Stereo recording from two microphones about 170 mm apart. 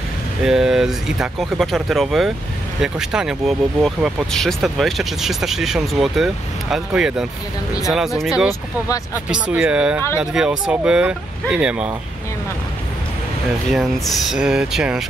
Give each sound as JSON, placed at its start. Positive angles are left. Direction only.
{"t": 0.5, "sound": "speech", "side_deg": -5}
{"t": 8.5, "sound": "speech", "side_deg": 20}
{"t": 9.1, "sound": "speech", "side_deg": -5}
{"t": 13.7, "sound": "speech", "side_deg": 0}